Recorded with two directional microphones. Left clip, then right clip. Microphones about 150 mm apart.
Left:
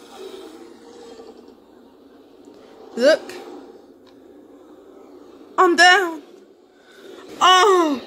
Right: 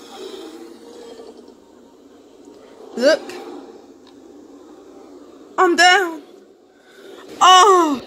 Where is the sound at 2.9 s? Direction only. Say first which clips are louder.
Even; 5° right (ahead or behind).